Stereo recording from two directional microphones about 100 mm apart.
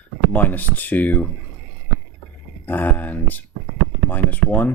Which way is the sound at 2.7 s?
20° left (ahead or behind).